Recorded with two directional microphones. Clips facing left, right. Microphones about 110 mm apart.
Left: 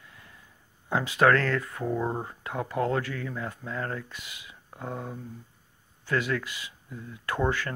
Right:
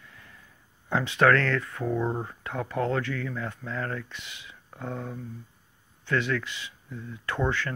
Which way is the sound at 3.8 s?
25° left (ahead or behind).